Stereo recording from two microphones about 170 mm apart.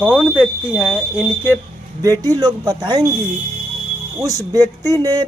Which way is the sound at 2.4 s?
25° right (ahead or behind).